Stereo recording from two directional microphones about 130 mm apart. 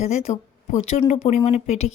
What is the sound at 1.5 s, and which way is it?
Speech, 55° left (ahead or behind).